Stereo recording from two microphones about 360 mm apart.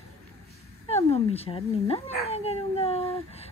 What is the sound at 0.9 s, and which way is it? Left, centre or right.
Speech, centre.